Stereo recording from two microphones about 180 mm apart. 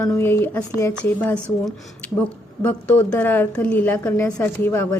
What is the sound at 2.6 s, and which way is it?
A woman's voice, 10° left (ahead or behind).